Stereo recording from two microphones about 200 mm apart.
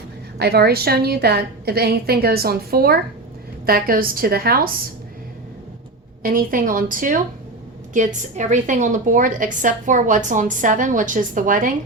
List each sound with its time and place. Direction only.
0.3 s a woman's voice: 55° right (ahead or behind)
6.2 s a woman's voice: 45° right (ahead or behind)